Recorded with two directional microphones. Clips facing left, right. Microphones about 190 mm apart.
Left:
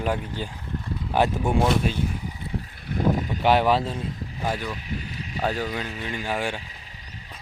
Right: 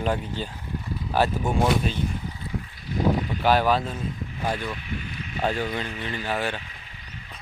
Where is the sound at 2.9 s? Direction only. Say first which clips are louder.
Even; 60° left (ahead or behind).